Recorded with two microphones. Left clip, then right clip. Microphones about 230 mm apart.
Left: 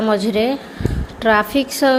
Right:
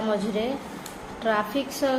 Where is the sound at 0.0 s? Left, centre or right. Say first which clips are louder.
Left 9 dB; left.